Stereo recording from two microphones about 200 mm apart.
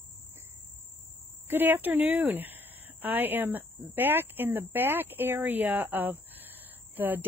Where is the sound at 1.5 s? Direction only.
10° right (ahead or behind).